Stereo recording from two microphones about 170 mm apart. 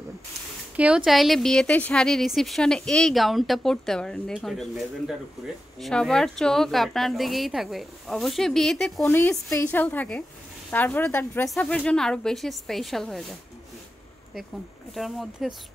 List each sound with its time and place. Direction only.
0.7 s a woman's voice: 5° right (ahead or behind)
15.0 s a woman's voice: centre (ahead or behind)